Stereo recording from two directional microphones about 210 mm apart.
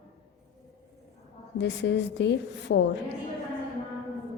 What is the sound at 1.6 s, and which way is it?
A woman's voice, 55° left (ahead or behind).